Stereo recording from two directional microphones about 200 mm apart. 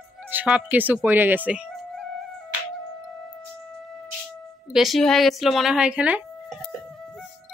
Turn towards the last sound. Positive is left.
turn(degrees=-5)  # may be behind; listen again after turning